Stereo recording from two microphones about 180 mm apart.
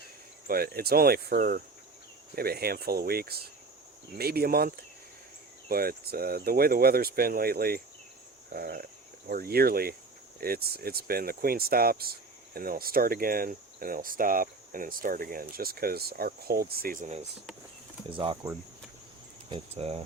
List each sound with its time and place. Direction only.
0.4 s speech: 55° right (ahead or behind)
19.5 s cricket: 30° right (ahead or behind)